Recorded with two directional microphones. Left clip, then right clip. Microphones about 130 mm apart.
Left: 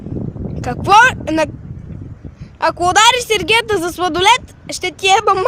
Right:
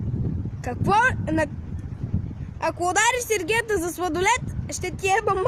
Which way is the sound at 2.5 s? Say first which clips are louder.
Left 10 dB; 30° left (ahead or behind).